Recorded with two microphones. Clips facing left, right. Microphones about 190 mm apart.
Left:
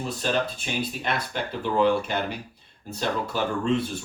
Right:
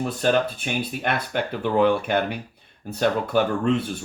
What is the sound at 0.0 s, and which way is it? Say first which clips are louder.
Speech: right 5 dB; 55° right (ahead or behind).